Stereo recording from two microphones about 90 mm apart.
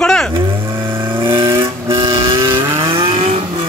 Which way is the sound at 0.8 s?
60° right (ahead or behind).